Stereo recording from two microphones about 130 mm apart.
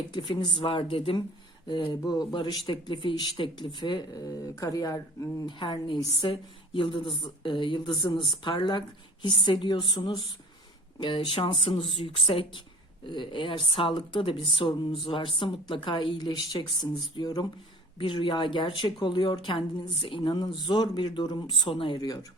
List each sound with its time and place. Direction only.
0.1 s speech: 35° left (ahead or behind)
21.9 s speech: 30° left (ahead or behind)